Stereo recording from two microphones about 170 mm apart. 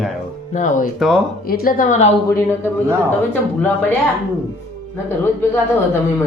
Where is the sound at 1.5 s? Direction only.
60° left (ahead or behind); by 2.1 s 45° left (ahead or behind).